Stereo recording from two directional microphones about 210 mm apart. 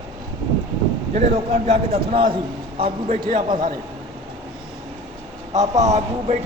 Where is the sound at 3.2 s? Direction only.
40° right (ahead or behind).